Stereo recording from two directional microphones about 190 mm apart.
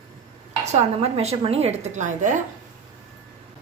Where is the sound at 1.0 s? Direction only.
30° right (ahead or behind).